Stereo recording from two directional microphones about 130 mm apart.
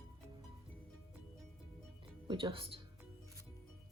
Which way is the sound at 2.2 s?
40° right (ahead or behind).